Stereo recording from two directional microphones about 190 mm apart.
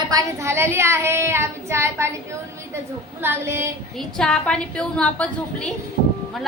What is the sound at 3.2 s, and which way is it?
Speech, 10° right (ahead or behind).